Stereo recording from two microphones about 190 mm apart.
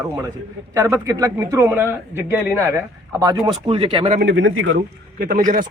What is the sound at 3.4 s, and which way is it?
Speech, 25° right (ahead or behind).